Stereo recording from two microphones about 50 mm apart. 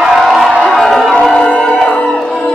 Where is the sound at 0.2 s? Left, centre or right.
Centre.